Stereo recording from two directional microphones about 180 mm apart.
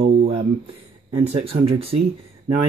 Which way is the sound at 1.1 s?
35° right (ahead or behind).